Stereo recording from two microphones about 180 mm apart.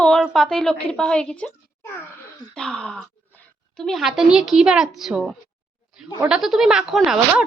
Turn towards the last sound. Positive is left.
turn(degrees=0)  # may be behind; listen again after turning